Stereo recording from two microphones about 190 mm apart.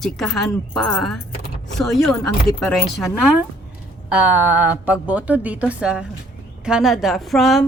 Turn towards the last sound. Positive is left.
turn(degrees=0)  # may be behind; listen again after turning